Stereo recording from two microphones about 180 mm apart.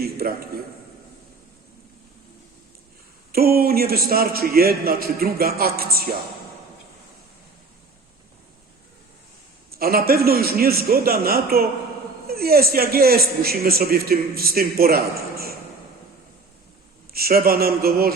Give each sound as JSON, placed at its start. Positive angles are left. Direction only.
{"t": 0.0, "sound": "a man's voice", "side_deg": -55}
{"t": 3.3, "sound": "a man's voice", "side_deg": -55}
{"t": 9.7, "sound": "a man's voice", "side_deg": -55}
{"t": 17.1, "sound": "a man's voice", "side_deg": -55}